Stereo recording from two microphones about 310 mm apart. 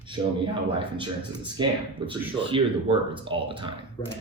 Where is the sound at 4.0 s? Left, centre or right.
Centre.